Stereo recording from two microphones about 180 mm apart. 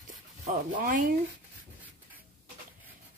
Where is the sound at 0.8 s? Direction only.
50° right (ahead or behind).